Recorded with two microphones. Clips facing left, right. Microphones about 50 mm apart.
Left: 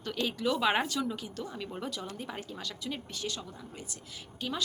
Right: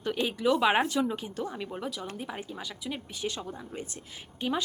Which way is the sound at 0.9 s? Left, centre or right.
Right.